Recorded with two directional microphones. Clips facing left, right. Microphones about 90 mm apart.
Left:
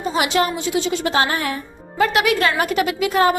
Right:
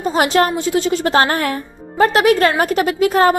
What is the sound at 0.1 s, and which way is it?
Speech, 45° right (ahead or behind).